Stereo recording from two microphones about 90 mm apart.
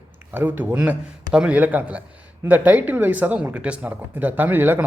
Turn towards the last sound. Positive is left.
turn(degrees=-25)  # may be behind; listen again after turning